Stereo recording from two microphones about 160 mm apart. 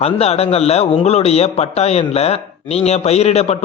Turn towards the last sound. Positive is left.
turn(degrees=40)  # may be behind; listen again after turning